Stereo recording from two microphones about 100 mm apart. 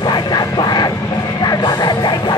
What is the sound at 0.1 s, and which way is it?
Music, 45° left (ahead or behind).